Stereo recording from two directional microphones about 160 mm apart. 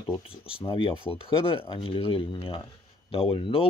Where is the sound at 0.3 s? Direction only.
35° left (ahead or behind).